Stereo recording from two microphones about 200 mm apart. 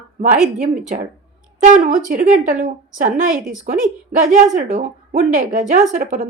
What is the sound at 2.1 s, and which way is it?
A woman's voice, 45° right (ahead or behind).